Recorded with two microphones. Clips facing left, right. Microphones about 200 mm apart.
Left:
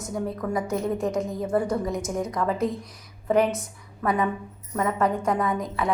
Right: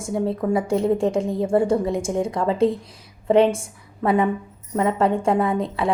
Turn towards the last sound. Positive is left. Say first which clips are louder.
# right 4 dB
turn(degrees=-30)  # may be behind; listen again after turning